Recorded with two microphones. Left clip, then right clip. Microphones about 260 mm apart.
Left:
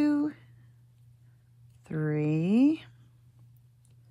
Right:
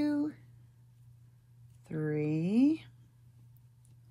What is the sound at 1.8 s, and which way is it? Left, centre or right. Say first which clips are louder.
Speech: left 3 dB; left.